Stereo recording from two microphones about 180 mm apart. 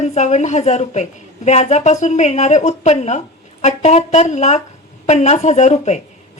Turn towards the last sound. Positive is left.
turn(degrees=40)  # may be behind; listen again after turning